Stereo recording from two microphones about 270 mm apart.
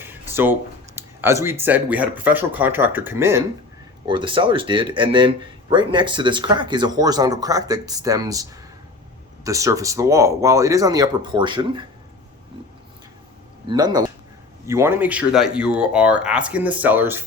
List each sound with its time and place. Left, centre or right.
0.0 s a sound: centre
0.9 s speech: centre
13.7 s speech: centre